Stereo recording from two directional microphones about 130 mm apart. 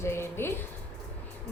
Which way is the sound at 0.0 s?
20° left (ahead or behind).